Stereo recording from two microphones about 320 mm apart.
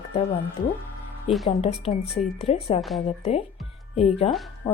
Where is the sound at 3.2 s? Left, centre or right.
Centre.